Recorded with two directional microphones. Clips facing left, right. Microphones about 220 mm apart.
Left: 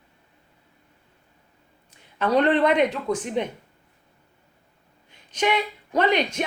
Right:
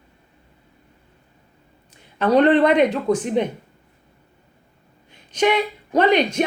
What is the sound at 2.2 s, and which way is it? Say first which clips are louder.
Speech: right 5 dB; 35° right (ahead or behind).